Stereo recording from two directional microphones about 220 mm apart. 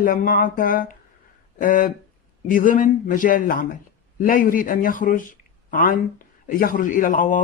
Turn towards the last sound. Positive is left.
turn(degrees=40)  # may be behind; listen again after turning